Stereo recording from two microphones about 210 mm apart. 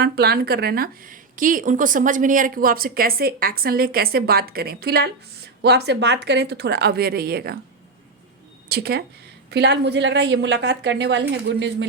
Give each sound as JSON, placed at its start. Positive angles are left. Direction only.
{"t": 0.0, "sound": "a woman's voice", "side_deg": -50}
{"t": 8.7, "sound": "a woman's voice", "side_deg": -50}